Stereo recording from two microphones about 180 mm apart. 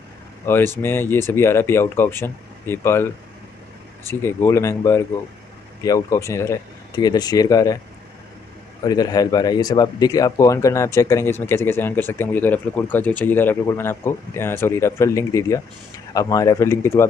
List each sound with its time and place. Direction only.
0.8 s speech: 15° left (ahead or behind)
4.1 s speech: 15° left (ahead or behind)
8.8 s speech: 20° left (ahead or behind)